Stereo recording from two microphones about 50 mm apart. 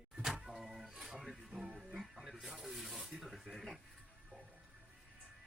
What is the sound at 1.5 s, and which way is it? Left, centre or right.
Music, right.